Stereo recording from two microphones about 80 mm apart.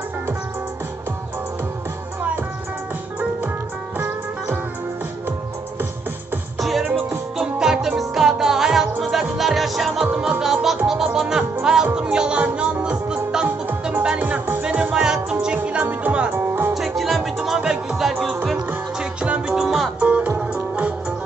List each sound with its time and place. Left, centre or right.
6.6 s music: centre
10.0 s music: centre
16.7 s music: centre
18.9 s music: centre
20.0 s music: centre